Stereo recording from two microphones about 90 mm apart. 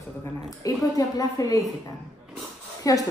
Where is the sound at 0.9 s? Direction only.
40° left (ahead or behind).